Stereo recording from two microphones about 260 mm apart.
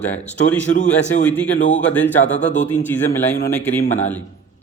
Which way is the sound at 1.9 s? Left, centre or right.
Centre.